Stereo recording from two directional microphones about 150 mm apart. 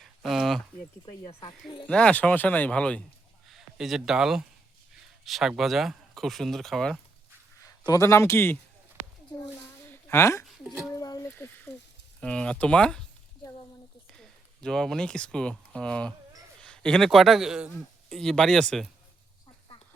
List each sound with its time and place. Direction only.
0.0 s a sound: centre (ahead or behind)
1.0 s speech: 35° left (ahead or behind)
1.9 s a man's voice: 5° left (ahead or behind)
7.6 s a man's voice: 20° left (ahead or behind)
9.9 s a sound: 15° left (ahead or behind)
11.3 s speech: 15° left (ahead or behind)
14.1 s a man's voice: 5° left (ahead or behind)